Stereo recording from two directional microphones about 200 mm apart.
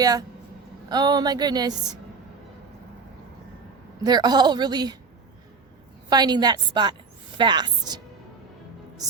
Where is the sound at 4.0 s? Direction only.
20° right (ahead or behind).